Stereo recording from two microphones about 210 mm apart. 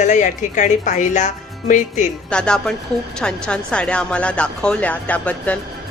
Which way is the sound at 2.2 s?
5° left (ahead or behind).